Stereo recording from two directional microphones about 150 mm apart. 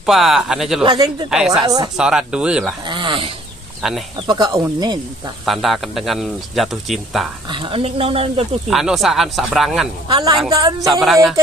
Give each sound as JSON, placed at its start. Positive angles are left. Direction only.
{"t": 0.0, "sound": "speech", "side_deg": 0}
{"t": 0.8, "sound": "speech", "side_deg": -25}
{"t": 2.0, "sound": "speech", "side_deg": -5}
{"t": 2.8, "sound": "speech", "side_deg": -35}
{"t": 3.8, "sound": "speech", "side_deg": 0}
{"t": 4.3, "sound": "speech", "side_deg": -25}
{"t": 5.4, "sound": "speech", "side_deg": 0}
{"t": 7.4, "sound": "speech", "side_deg": -35}
{"t": 8.6, "sound": "speech", "side_deg": 0}
{"t": 10.0, "sound": "speech", "side_deg": -30}
{"t": 10.9, "sound": "speech", "side_deg": 0}